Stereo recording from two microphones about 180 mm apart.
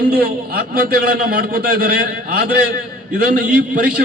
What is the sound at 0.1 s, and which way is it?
A man's voice, 55° right (ahead or behind).